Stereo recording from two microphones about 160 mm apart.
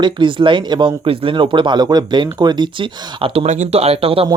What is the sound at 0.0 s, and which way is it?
Speech, 30° right (ahead or behind).